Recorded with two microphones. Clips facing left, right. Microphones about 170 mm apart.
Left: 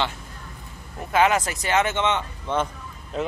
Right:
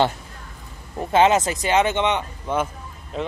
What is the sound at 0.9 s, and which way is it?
Speech, 25° right (ahead or behind).